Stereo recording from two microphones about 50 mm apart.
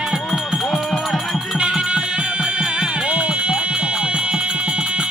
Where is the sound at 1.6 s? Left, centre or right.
Centre.